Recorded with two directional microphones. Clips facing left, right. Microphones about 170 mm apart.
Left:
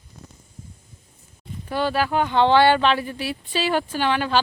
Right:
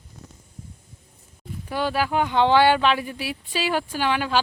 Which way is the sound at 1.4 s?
10° right (ahead or behind).